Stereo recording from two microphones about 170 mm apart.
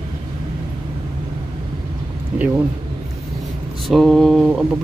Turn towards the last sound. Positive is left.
turn(degrees=-5)  # may be behind; listen again after turning